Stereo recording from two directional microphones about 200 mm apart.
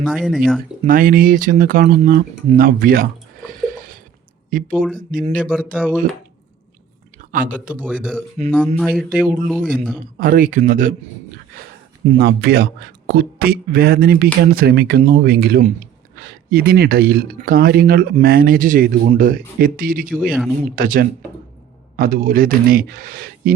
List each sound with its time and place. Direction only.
0.0 s speech: 5° right (ahead or behind)
0.9 s speech: 45° right (ahead or behind)
4.5 s speech: 45° right (ahead or behind)
5.5 s speech: 5° left (ahead or behind)
7.2 s speech: 45° right (ahead or behind)
8.7 s speech: 5° left (ahead or behind)
10.2 s speech: 45° right (ahead or behind)
12.0 s speech: 55° right (ahead or behind)
20.1 s speech: centre (ahead or behind)
20.7 s speech: 45° right (ahead or behind)